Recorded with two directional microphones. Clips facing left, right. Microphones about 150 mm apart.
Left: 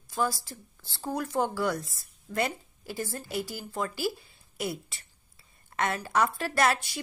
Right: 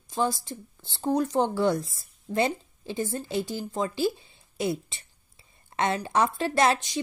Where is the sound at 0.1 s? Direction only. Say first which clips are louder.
Right 3 dB; 20° right (ahead or behind).